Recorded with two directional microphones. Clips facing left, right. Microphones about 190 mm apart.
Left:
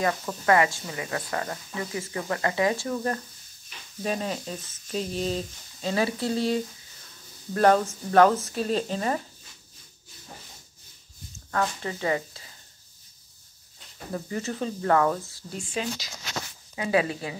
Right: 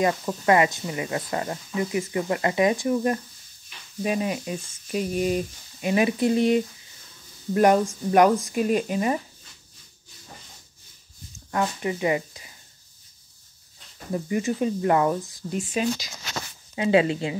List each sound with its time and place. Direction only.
0.0 s speech: 20° right (ahead or behind)
11.5 s speech: 15° right (ahead or behind)
14.1 s speech: 15° right (ahead or behind)